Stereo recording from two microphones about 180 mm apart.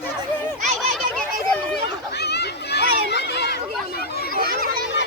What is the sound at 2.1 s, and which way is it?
Children playing, 65° left (ahead or behind).